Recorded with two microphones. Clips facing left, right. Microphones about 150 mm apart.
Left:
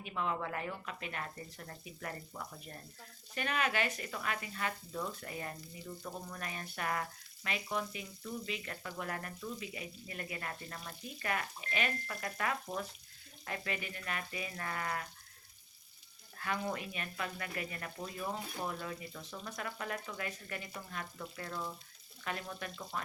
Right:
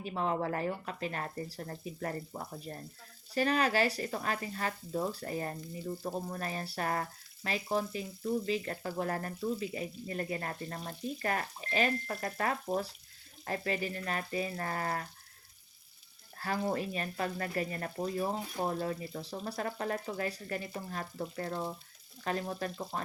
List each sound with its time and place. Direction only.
0.0 s speech: 35° right (ahead or behind)
16.4 s speech: 35° right (ahead or behind)